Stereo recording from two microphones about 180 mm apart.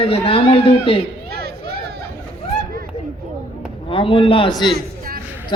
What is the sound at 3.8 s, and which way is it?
Speech, 30° left (ahead or behind).